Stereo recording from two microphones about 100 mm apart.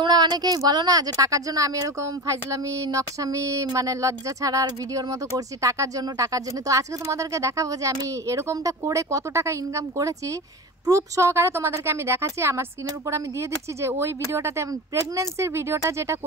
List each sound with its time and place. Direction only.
0.0 s a woman's voice: 45° right (ahead or behind); by 16.2 s 30° right (ahead or behind)